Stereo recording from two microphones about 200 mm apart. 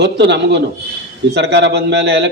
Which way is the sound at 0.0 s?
60° right (ahead or behind).